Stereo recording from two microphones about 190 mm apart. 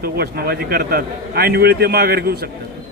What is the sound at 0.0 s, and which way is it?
A man's voice, 55° right (ahead or behind).